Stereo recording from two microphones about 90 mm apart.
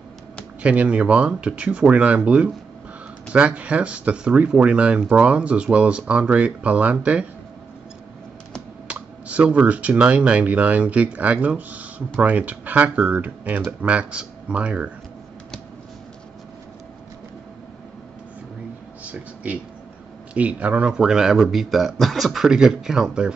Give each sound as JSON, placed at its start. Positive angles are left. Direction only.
{"t": 0.6, "sound": "speech", "side_deg": -15}
{"t": 8.8, "sound": "speech", "side_deg": -15}
{"t": 19.0, "sound": "a sound", "side_deg": -15}
{"t": 20.3, "sound": "speech", "side_deg": -15}